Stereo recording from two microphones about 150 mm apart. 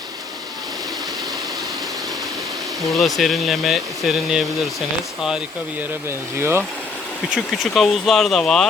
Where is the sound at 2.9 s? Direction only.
Centre (ahead or behind).